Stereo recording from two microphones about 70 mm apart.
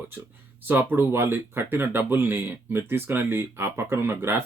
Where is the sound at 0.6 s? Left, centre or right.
Right.